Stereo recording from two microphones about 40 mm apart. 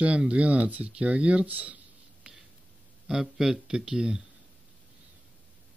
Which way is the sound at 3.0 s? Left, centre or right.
Centre.